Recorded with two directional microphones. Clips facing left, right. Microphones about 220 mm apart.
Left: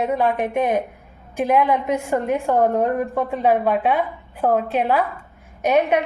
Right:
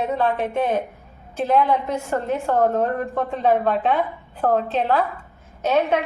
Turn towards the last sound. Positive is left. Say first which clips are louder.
# left 2 dB
turn(degrees=15)  # may be behind; listen again after turning